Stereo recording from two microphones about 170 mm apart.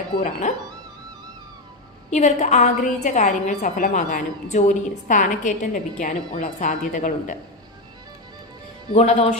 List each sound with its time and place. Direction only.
0.2 s a woman's voice: 50° left (ahead or behind)
2.0 s a woman's voice: 40° left (ahead or behind)
8.9 s speech: 40° left (ahead or behind)